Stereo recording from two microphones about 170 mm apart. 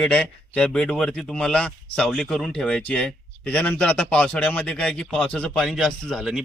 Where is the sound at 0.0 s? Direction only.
5° left (ahead or behind).